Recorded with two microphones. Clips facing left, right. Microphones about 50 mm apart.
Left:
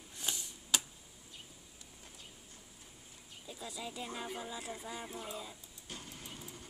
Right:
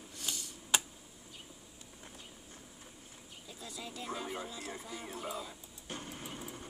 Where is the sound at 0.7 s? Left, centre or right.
Right.